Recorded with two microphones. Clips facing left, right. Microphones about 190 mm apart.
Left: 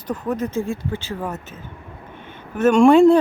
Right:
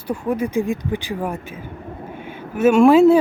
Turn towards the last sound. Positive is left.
turn(degrees=-5)  # may be behind; listen again after turning